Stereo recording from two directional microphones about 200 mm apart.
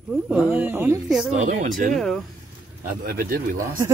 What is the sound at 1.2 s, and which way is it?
Speech, 35° right (ahead or behind).